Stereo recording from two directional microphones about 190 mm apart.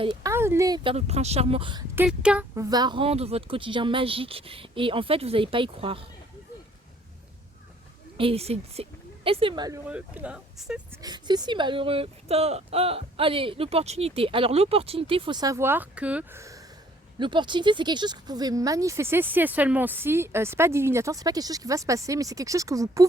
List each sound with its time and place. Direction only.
0.0 s speech: 25° right (ahead or behind)
0.3 s speech: 15° right (ahead or behind)
0.9 s speech: 35° right (ahead or behind)
2.0 s speech: 5° right (ahead or behind)
2.6 s speech: 20° right (ahead or behind)
8.2 s speech: 30° right (ahead or behind)
9.9 s speech: 5° right (ahead or behind)
11.0 s speech: 20° right (ahead or behind)